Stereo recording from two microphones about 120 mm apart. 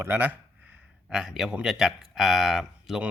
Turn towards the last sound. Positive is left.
turn(degrees=-5)  # may be behind; listen again after turning